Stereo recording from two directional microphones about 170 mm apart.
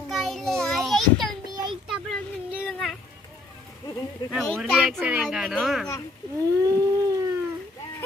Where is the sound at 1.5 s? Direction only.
25° right (ahead or behind).